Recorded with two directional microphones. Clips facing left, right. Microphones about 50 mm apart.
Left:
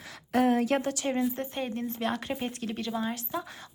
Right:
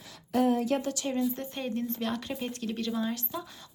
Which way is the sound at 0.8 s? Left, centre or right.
Left.